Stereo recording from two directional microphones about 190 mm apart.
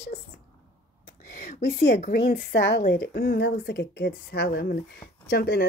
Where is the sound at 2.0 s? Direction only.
45° left (ahead or behind).